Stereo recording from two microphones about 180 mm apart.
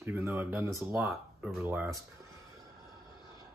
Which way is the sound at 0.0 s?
15° right (ahead or behind).